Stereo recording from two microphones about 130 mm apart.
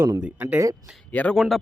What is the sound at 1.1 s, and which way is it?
Speech, 10° left (ahead or behind).